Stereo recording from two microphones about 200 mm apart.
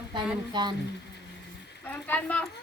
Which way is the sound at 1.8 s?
10° left (ahead or behind).